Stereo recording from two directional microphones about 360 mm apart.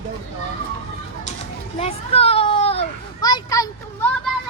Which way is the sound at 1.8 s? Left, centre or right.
Centre.